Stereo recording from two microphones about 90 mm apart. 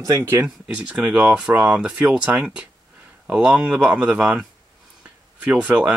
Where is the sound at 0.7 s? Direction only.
15° right (ahead or behind).